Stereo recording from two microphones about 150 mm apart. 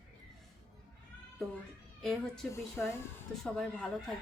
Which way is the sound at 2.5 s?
20° left (ahead or behind).